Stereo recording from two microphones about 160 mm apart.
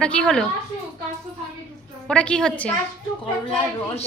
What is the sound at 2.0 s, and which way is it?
Speech, 5° left (ahead or behind).